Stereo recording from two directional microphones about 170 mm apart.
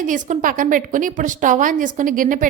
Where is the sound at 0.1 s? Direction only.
50° right (ahead or behind).